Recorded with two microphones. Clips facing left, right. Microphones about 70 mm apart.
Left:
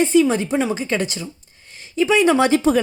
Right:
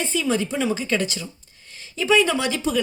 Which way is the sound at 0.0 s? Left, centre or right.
Left.